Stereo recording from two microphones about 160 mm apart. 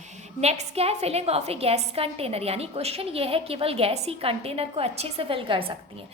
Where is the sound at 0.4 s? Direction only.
40° right (ahead or behind).